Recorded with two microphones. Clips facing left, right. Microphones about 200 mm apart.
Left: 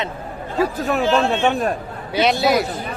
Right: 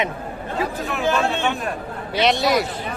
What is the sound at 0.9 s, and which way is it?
Speech, 50° left (ahead or behind).